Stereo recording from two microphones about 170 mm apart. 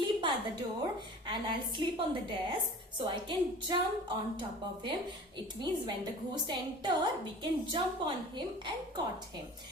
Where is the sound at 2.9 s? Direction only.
30° right (ahead or behind).